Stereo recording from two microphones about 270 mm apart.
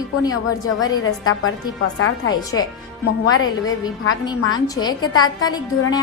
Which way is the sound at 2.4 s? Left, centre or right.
Centre.